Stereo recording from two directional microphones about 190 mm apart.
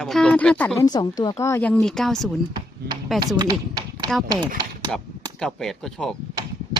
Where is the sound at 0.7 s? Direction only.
20° left (ahead or behind); by 2.3 s centre (ahead or behind).